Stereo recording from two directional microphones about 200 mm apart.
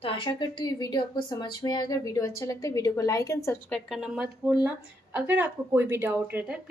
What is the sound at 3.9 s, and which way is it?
Speech, 5° right (ahead or behind).